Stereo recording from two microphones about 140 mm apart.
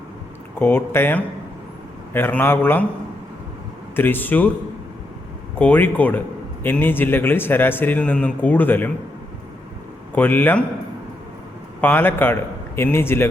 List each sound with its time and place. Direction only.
0.6 s a man's voice: 15° left (ahead or behind)
3.9 s a man's voice: 15° left (ahead or behind)
5.5 s a man's voice: 10° left (ahead or behind)
10.2 s a man's voice: 15° left (ahead or behind)
11.8 s a man's voice: 15° left (ahead or behind)